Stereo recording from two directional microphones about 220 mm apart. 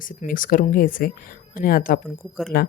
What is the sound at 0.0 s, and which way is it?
Speech, 40° left (ahead or behind).